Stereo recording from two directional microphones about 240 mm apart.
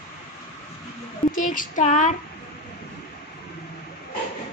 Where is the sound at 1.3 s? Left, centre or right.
Left.